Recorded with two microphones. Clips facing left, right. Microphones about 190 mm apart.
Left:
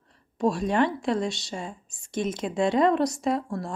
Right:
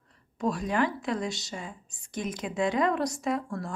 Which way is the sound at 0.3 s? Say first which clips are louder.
Left 4 dB; 25° left (ahead or behind).